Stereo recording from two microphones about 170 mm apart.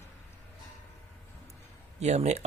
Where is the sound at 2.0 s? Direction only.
40° right (ahead or behind).